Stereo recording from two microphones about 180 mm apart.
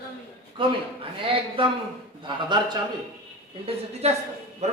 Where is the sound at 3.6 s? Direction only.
35° right (ahead or behind).